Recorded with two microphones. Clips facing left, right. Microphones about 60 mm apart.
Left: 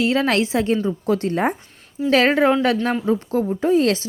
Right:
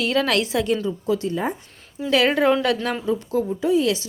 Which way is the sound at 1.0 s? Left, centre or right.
Left.